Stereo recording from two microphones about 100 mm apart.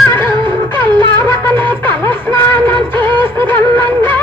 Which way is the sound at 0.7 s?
50° right (ahead or behind).